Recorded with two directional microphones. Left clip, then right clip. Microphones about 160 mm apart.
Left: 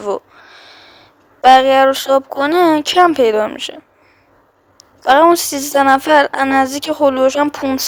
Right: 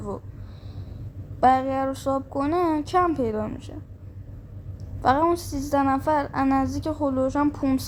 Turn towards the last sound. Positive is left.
turn(degrees=40)  # may be behind; listen again after turning